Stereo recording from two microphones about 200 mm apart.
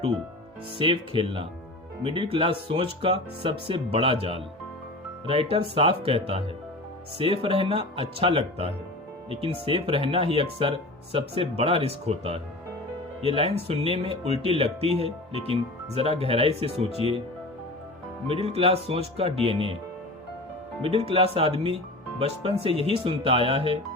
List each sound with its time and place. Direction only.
0.8 s speech: 25° right (ahead or behind)
18.3 s speech: 30° right (ahead or behind)
20.8 s speech: 30° right (ahead or behind)